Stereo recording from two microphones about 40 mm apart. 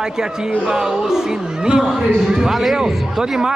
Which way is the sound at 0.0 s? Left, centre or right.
Centre.